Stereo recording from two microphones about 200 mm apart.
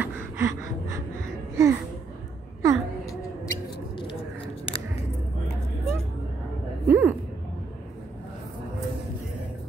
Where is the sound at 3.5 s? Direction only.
25° left (ahead or behind).